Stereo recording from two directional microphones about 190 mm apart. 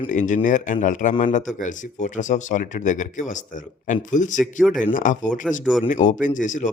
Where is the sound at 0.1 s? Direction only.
40° left (ahead or behind).